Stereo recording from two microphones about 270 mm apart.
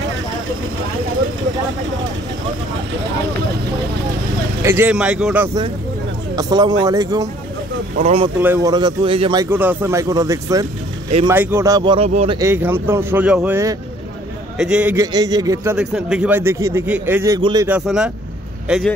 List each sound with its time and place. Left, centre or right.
4.6 s a man's voice: centre; by 8.3 s right
8.4 s a man's voice: centre